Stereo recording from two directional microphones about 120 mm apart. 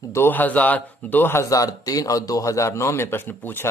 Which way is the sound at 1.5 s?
30° left (ahead or behind).